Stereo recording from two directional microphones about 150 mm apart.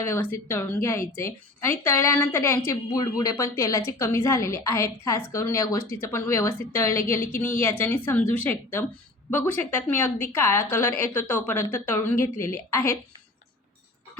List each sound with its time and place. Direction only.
0.0 s a woman's voice: 15° left (ahead or behind)